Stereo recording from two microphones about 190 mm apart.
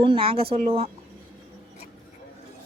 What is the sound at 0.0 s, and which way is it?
Speech, 30° right (ahead or behind).